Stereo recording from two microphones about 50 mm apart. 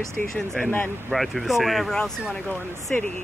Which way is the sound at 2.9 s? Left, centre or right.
Left.